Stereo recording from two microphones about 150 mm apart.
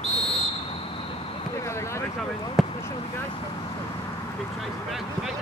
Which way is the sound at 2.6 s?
Centre (ahead or behind).